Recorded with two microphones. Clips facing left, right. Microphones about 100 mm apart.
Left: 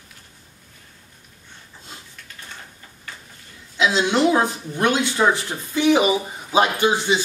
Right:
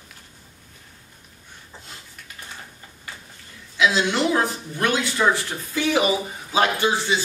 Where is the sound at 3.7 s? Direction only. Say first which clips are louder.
Left 2 dB; 25° left (ahead or behind).